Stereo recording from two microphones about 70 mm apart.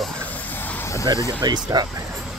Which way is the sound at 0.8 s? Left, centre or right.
Left.